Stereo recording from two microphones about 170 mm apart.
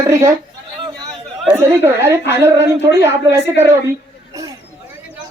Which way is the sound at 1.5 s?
15° right (ahead or behind).